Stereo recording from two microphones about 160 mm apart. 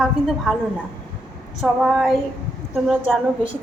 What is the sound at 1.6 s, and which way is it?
A woman's voice, centre (ahead or behind).